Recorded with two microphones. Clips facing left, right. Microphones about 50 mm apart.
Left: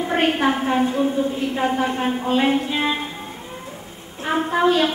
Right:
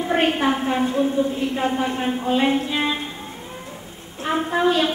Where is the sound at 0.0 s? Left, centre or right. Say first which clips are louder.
Even; centre.